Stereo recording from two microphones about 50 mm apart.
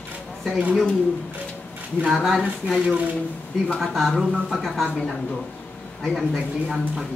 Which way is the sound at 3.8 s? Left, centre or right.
Centre.